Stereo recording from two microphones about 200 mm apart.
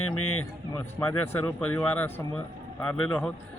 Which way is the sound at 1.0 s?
10° left (ahead or behind).